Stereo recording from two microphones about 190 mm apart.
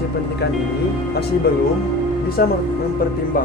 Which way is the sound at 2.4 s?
55° left (ahead or behind).